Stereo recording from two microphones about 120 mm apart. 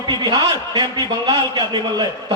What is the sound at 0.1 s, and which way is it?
A man's voice, 35° right (ahead or behind).